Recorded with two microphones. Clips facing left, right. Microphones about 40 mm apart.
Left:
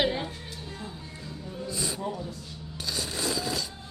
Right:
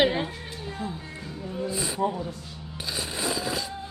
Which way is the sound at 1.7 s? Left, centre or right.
Centre.